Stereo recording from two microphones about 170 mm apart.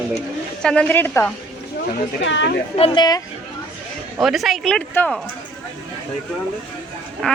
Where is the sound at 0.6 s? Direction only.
5° left (ahead or behind).